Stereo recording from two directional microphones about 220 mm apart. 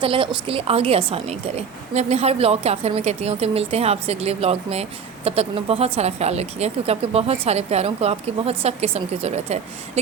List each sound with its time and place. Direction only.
0.0 s a woman's voice: 25° right (ahead or behind)